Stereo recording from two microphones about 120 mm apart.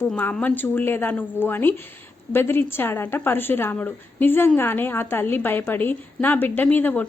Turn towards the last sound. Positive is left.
turn(degrees=15)  # may be behind; listen again after turning